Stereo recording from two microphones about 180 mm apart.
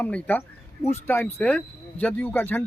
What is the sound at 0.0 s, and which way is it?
Speech, 10° left (ahead or behind).